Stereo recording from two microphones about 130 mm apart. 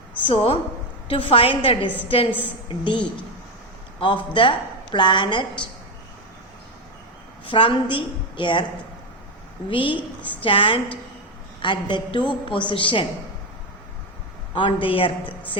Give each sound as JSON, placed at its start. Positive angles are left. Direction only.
{"t": 0.3, "sound": "a woman's voice", "side_deg": 45}
{"t": 4.4, "sound": "a woman's voice", "side_deg": 40}
{"t": 7.4, "sound": "a woman's voice", "side_deg": 40}
{"t": 9.6, "sound": "a woman's voice", "side_deg": 40}
{"t": 14.5, "sound": "a woman's voice", "side_deg": 40}